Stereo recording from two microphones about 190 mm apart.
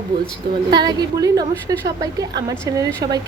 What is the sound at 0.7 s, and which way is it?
A woman's voice, 20° right (ahead or behind).